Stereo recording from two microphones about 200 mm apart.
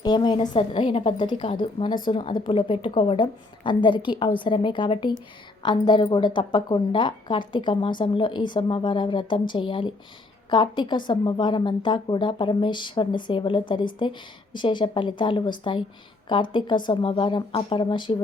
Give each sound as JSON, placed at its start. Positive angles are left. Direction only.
{"t": 0.0, "sound": "a woman's voice", "side_deg": 20}